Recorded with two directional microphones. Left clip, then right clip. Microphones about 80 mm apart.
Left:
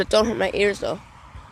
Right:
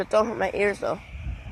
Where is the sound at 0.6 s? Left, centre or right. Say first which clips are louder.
Left 2 dB; left.